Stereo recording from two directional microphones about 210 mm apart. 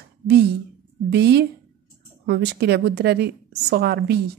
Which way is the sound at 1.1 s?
50° right (ahead or behind).